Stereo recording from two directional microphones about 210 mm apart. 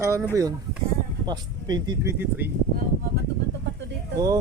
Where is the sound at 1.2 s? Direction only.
20° right (ahead or behind).